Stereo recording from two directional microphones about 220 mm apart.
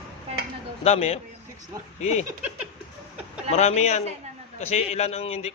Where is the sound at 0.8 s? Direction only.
30° left (ahead or behind).